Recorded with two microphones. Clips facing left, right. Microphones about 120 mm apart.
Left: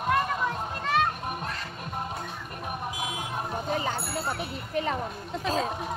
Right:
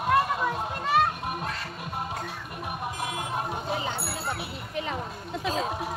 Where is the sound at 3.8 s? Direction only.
40° left (ahead or behind).